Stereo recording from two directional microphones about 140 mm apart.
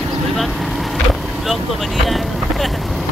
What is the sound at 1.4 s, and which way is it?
Speech, centre (ahead or behind).